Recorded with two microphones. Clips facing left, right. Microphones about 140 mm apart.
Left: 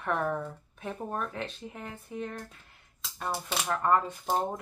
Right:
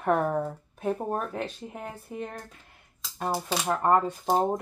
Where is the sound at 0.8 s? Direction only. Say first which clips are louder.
Right 6 dB; 45° right (ahead or behind).